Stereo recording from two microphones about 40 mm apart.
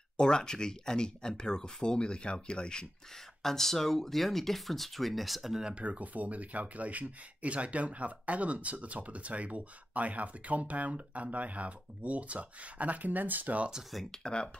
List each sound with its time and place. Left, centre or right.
0.2 s speech: centre
3.4 s speech: centre
5.6 s speech: right
5.9 s speech: right
14.1 s speech: left